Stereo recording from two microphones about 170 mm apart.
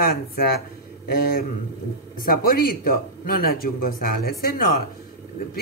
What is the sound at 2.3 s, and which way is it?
Speech, 60° left (ahead or behind).